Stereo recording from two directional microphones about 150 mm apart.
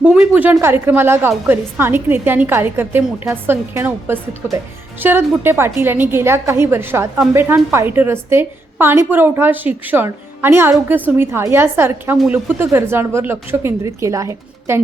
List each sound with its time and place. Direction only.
0.0 s a woman's voice: 10° right (ahead or behind)